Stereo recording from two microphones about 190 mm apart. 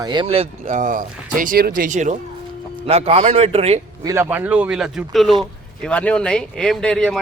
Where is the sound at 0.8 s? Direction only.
45° right (ahead or behind).